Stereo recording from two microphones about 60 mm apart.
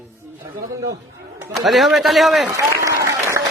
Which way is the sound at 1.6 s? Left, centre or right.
Centre.